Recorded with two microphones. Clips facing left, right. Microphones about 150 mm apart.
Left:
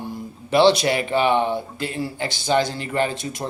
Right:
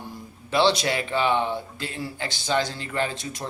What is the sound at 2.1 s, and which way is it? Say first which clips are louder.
Speech: left 4 dB; 15° left (ahead or behind).